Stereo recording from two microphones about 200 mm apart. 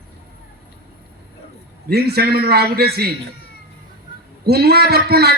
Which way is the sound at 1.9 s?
50° right (ahead or behind).